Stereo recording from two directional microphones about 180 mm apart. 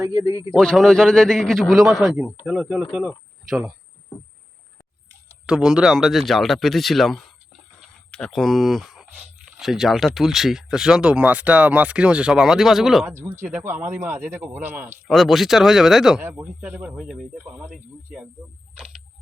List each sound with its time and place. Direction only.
0.0 s speech: 15° right (ahead or behind)
0.5 s speech: 5° left (ahead or behind)
5.5 s speech: 5° right (ahead or behind)
7.8 s a sound: 5° left (ahead or behind)
9.5 s speech: centre (ahead or behind)
13.1 s speech: 15° right (ahead or behind)
15.0 s speech: centre (ahead or behind)